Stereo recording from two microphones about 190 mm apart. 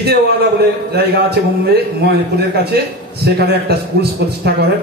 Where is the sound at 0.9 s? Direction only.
55° right (ahead or behind).